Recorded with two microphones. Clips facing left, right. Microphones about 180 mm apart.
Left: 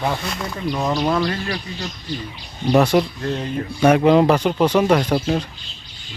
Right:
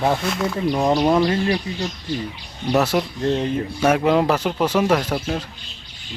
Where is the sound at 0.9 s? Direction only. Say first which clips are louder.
Right 3 dB; 25° right (ahead or behind).